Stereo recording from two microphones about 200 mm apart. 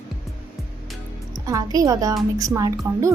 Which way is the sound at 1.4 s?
15° right (ahead or behind).